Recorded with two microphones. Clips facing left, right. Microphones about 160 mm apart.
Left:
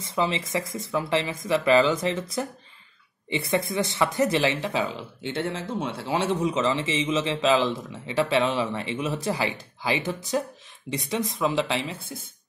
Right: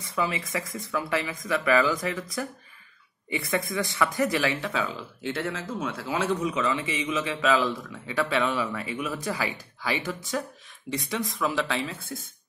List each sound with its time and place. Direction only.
0.0 s speech: 25° left (ahead or behind)
3.3 s speech: 25° left (ahead or behind)